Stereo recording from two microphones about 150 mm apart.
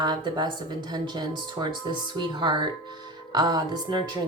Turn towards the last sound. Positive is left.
turn(degrees=-30)  # may be behind; listen again after turning